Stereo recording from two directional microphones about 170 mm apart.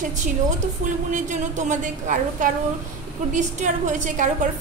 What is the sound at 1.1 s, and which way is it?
A woman's voice, 45° right (ahead or behind).